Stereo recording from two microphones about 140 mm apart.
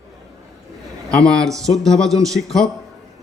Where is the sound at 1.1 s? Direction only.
5° left (ahead or behind).